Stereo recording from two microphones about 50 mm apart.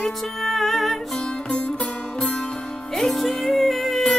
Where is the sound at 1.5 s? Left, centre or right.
Centre.